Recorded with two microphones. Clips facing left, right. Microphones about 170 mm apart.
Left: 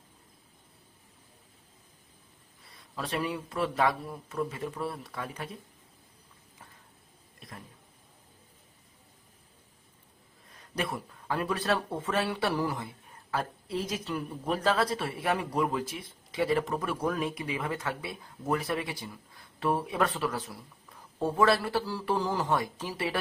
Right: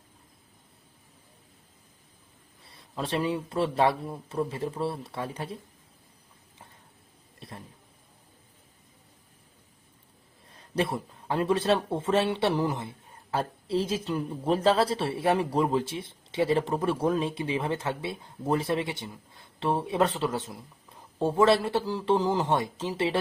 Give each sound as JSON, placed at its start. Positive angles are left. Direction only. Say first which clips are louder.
{"t": 2.6, "sound": "speech", "louder": "right 4 dB", "side_deg": -30}
{"t": 7.3, "sound": "a sound", "louder": "right 3 dB", "side_deg": -30}
{"t": 10.5, "sound": "speech", "louder": "right 5 dB", "side_deg": -30}